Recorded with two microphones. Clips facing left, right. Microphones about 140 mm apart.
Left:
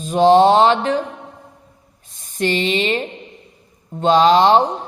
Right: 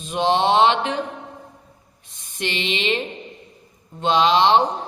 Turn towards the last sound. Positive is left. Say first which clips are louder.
# left 4 dB
turn(degrees=45)  # may be behind; listen again after turning